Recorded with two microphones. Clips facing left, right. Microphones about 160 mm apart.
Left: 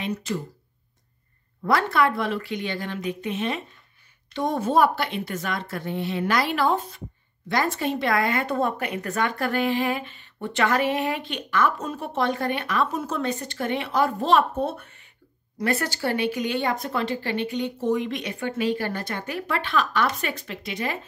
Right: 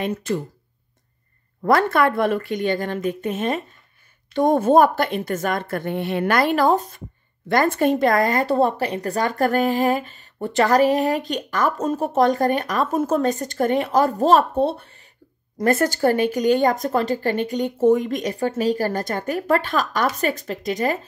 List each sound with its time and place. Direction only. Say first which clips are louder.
0.0 s speech: right 5 dB; 50° right (ahead or behind)
1.6 s speech: right 4 dB; 50° right (ahead or behind)
7.4 s speech: right 7 dB; 50° right (ahead or behind); by 15.0 s 30° right (ahead or behind)
15.6 s speech: right 7 dB; 45° right (ahead or behind)